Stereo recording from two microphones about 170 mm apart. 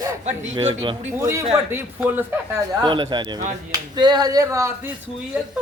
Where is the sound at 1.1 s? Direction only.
15° right (ahead or behind).